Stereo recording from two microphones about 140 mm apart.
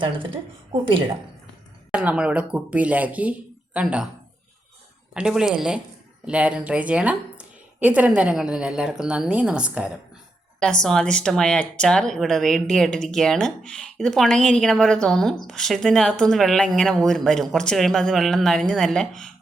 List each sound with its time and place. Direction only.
0.0 s a woman's voice: 35° right (ahead or behind)
1.9 s a woman's voice: 10° right (ahead or behind)
5.1 s a woman's voice: 5° right (ahead or behind)
10.6 s speech: 5° left (ahead or behind)